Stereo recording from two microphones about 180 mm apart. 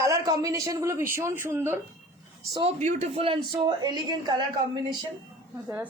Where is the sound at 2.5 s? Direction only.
35° right (ahead or behind).